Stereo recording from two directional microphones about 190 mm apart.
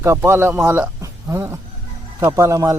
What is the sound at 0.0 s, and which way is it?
A man's voice, 15° right (ahead or behind).